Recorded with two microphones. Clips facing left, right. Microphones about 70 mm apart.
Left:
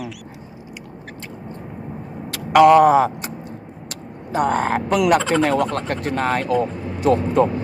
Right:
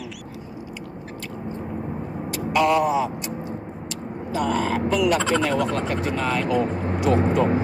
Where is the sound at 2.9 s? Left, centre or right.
Left.